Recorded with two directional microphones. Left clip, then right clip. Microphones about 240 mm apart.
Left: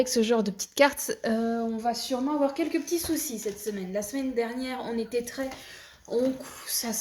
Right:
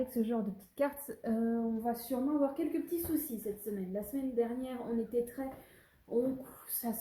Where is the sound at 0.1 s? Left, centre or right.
Left.